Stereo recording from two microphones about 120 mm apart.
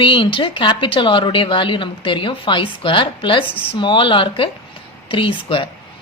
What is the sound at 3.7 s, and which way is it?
Speech, 45° left (ahead or behind).